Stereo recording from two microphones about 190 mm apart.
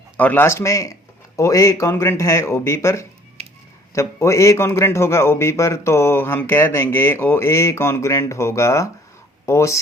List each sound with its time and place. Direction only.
0.2 s a man's voice: 10° left (ahead or behind)
3.4 s a sound: 30° right (ahead or behind)
3.9 s a man's voice: 15° left (ahead or behind)